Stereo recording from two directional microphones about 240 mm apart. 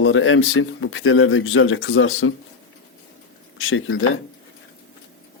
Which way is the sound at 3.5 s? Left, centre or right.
Left.